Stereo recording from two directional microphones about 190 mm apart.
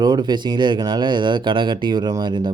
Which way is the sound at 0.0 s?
20° right (ahead or behind).